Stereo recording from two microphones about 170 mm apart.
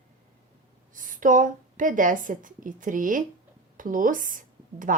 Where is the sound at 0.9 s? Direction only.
50° right (ahead or behind).